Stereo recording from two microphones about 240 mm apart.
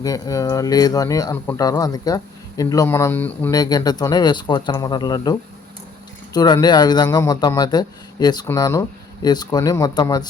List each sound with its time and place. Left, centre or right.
0.0 s speech: centre